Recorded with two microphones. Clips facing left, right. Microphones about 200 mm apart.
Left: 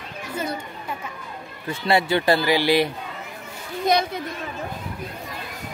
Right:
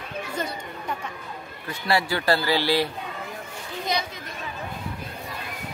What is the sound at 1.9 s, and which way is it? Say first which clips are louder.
Speech: left 4 dB; 20° left (ahead or behind).